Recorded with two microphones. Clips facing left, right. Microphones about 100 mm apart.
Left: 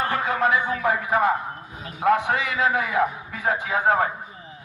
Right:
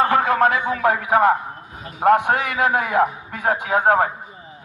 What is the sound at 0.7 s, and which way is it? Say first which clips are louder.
A man's voice: right 4 dB; 55° right (ahead or behind).